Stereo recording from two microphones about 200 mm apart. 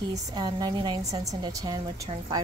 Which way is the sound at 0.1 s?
20° right (ahead or behind).